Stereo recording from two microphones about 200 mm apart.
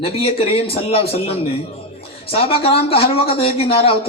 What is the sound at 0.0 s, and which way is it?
Speech, 30° left (ahead or behind).